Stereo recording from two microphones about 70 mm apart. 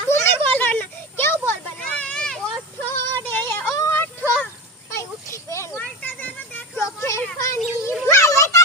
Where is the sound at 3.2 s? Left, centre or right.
Left.